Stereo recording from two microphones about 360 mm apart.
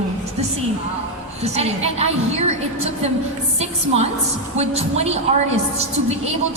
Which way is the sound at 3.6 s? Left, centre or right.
Centre.